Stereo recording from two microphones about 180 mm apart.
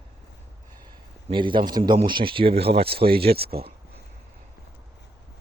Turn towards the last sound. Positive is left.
turn(degrees=-60)  # may be behind; listen again after turning